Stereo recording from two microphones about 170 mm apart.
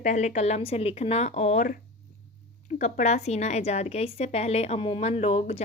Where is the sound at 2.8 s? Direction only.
45° left (ahead or behind).